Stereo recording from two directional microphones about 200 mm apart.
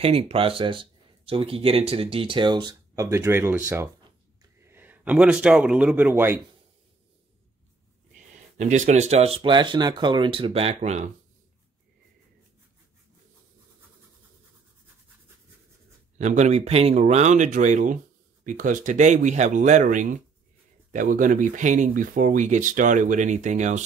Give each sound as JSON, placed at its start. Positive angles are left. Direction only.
{"t": 0.0, "sound": "speech", "side_deg": -30}
{"t": 8.5, "sound": "speech", "side_deg": -35}
{"t": 16.2, "sound": "speech", "side_deg": -35}